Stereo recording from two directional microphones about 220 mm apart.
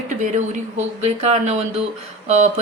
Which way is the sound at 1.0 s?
30° right (ahead or behind).